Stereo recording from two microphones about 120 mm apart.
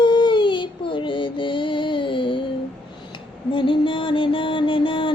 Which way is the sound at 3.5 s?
45° left (ahead or behind).